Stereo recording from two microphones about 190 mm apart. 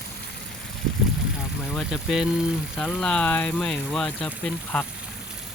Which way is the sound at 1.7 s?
Centre (ahead or behind).